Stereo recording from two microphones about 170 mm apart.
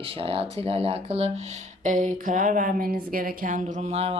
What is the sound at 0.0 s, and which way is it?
Speech, 35° right (ahead or behind).